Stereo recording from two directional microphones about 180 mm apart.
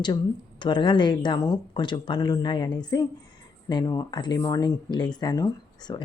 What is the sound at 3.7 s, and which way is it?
A woman's voice, 20° left (ahead or behind).